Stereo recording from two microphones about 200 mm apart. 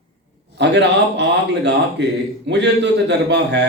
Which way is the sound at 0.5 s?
60° right (ahead or behind).